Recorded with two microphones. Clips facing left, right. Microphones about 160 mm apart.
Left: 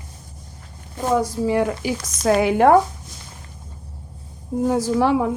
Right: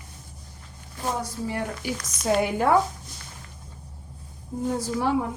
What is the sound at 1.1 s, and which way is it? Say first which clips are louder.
Speech: left 13 dB; 90° left.